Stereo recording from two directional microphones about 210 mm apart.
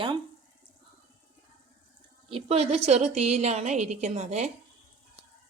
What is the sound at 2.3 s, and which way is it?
A woman's voice, 30° right (ahead or behind).